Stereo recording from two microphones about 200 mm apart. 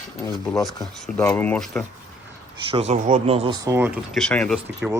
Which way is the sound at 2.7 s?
35° right (ahead or behind).